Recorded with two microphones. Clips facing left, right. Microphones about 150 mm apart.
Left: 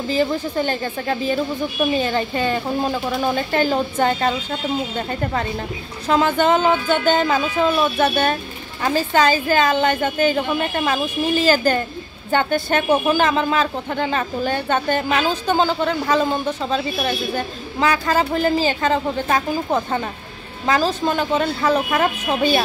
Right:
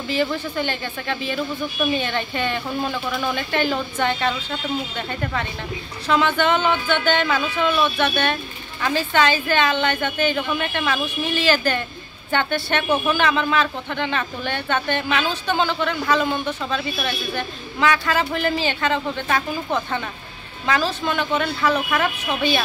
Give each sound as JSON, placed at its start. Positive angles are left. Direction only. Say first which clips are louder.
{"t": 0.1, "sound": "speech", "louder": "left 3 dB", "side_deg": 35}